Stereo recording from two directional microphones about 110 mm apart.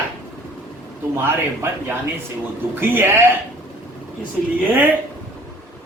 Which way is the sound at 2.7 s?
20° right (ahead or behind).